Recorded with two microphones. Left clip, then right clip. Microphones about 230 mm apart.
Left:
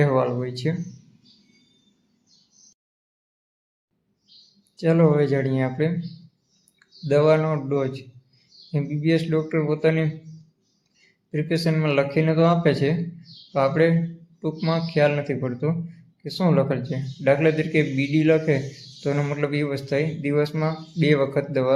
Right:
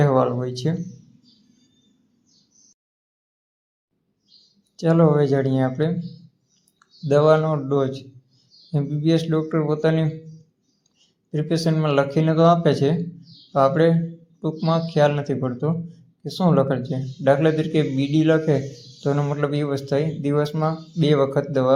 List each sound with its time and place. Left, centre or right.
0.0 s speech: centre
4.8 s speech: centre
11.3 s speech: centre